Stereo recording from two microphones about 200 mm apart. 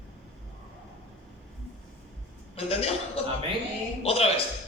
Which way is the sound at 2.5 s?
30° left (ahead or behind).